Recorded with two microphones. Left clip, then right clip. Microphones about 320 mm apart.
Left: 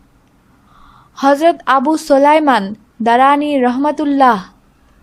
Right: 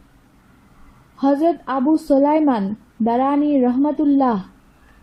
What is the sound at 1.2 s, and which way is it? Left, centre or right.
A woman's voice, left.